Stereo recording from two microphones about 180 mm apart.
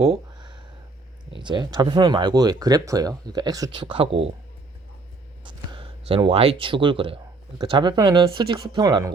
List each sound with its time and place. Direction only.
1.4 s speech: 25° right (ahead or behind)
5.4 s speech: 25° right (ahead or behind)